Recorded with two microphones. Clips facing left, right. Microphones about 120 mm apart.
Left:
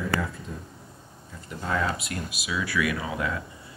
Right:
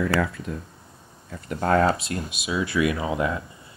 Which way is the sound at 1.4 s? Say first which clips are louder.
Right 8 dB; 60° right (ahead or behind).